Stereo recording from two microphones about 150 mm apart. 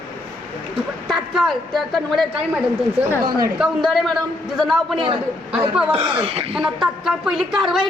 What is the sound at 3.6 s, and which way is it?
A woman's voice, centre (ahead or behind).